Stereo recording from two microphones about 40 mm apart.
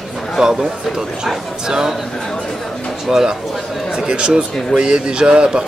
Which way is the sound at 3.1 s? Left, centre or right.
Centre.